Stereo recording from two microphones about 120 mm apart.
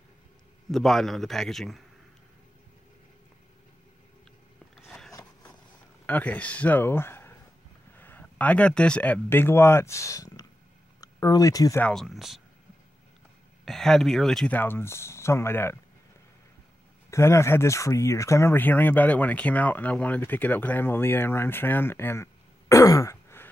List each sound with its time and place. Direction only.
0.7 s a man's voice: centre (ahead or behind)
4.7 s a sound: 5° left (ahead or behind)
5.1 s vehicle: 35° left (ahead or behind)
6.0 s speech: 15° left (ahead or behind); by 11.8 s 30° left (ahead or behind)
11.8 s a man's voice: 5° left (ahead or behind)
13.7 s speech: centre (ahead or behind); by 15.8 s 20° left (ahead or behind)
17.1 s speech: 25° left (ahead or behind)